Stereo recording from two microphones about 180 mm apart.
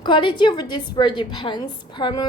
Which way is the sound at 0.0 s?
25° left (ahead or behind).